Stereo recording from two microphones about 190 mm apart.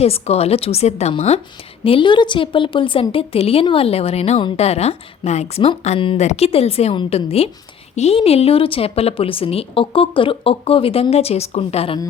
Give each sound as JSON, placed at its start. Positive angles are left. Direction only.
{"t": 0.0, "sound": "a woman's voice", "side_deg": 30}